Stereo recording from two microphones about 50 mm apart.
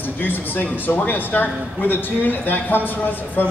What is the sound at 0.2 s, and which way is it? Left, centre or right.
Speech, left.